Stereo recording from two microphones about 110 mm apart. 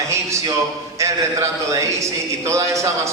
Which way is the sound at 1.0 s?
30° right (ahead or behind).